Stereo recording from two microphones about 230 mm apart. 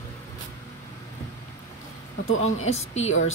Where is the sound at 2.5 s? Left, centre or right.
Left.